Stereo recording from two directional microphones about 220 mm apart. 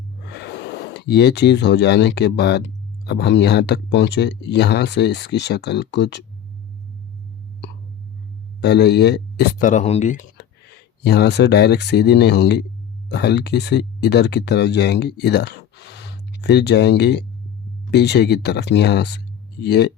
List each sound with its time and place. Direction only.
0.3 s speech: 50° left (ahead or behind)
8.6 s speech: 50° left (ahead or behind)
10.3 s speech: 50° left (ahead or behind)